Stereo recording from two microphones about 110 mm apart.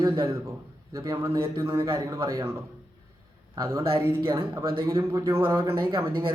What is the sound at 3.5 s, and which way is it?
A man's voice, 25° right (ahead or behind).